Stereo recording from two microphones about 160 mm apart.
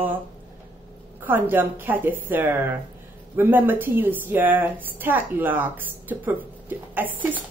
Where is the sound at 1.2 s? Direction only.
10° right (ahead or behind).